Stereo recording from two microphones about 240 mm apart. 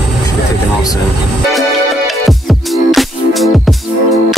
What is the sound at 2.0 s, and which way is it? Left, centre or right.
Music, centre.